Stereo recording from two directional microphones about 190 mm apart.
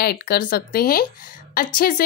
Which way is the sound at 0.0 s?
55° left (ahead or behind).